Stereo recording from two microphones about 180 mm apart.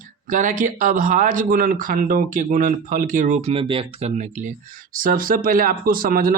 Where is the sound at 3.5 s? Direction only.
30° right (ahead or behind); by 6.3 s 55° right (ahead or behind).